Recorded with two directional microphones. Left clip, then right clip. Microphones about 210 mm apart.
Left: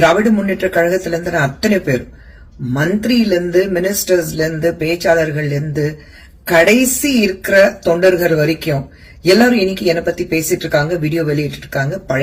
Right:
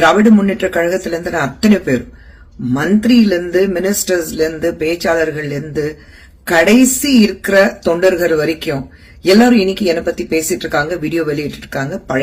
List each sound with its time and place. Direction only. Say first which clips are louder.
0.0 s speech: right 2 dB; 20° right (ahead or behind)
3.0 s a woman's voice: right 2 dB; 20° right (ahead or behind)